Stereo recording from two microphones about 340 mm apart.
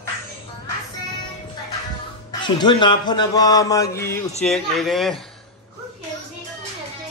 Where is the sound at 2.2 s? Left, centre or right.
Centre.